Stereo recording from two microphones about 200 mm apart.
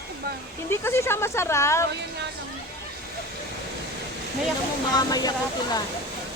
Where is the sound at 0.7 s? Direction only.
10° left (ahead or behind).